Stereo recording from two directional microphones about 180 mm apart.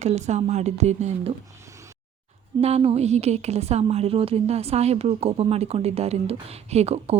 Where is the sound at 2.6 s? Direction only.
35° right (ahead or behind).